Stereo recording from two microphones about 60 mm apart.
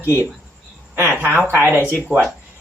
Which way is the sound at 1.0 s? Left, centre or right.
Right.